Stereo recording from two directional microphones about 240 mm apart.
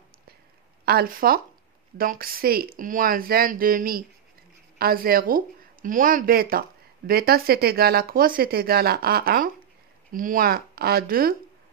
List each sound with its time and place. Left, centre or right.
0.8 s speech: right